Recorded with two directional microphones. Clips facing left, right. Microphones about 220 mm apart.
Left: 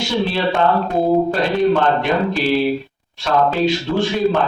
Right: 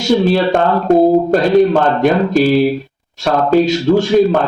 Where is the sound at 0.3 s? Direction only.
45° right (ahead or behind).